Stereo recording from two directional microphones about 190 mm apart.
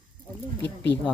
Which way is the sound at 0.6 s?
65° left (ahead or behind).